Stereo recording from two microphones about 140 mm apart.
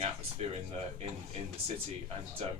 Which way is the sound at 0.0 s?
45° right (ahead or behind).